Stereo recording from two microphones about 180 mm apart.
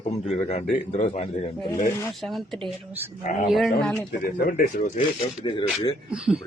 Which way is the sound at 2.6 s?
10° right (ahead or behind).